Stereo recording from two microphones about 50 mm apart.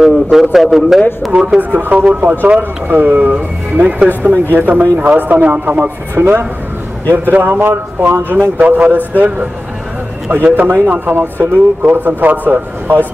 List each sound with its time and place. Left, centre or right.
0.0 s a man's voice: centre
1.3 s a man's voice: centre
1.6 s speech: right
4.2 s speech: right
7.3 s speech: right
10.3 s speech: right